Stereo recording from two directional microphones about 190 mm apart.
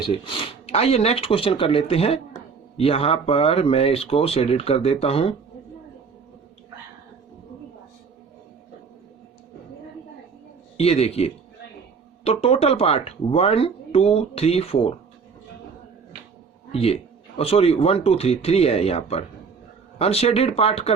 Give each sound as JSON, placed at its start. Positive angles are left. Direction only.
{"t": 0.0, "sound": "speech", "side_deg": 30}
{"t": 10.8, "sound": "speech", "side_deg": 35}
{"t": 16.7, "sound": "speech", "side_deg": 30}